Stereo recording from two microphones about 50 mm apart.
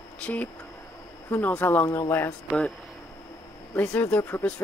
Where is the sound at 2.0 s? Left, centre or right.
Left.